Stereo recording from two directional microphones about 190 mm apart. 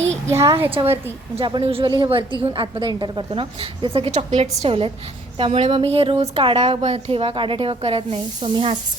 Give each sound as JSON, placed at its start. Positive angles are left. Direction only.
{"t": 0.3, "sound": "a woman's voice", "side_deg": -15}